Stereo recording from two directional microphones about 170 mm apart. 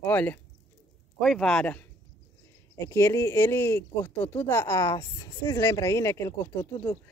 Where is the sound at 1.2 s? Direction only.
Centre (ahead or behind).